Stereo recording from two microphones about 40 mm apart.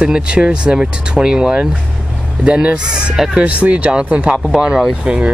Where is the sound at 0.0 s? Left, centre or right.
Right.